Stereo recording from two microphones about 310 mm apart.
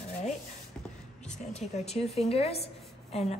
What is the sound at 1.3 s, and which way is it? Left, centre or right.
A woman's voice, left.